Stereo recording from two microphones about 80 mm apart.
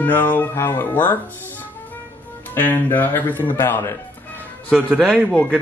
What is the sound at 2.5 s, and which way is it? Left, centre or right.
Speech, left.